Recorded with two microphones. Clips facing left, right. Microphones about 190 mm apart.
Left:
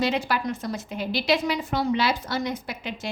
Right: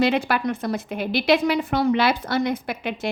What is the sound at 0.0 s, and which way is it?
A woman's voice, 60° right (ahead or behind).